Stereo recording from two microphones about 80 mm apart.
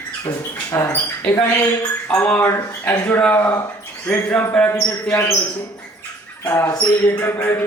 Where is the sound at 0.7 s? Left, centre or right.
Left.